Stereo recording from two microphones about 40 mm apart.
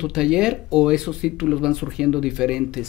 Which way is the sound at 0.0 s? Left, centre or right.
Centre.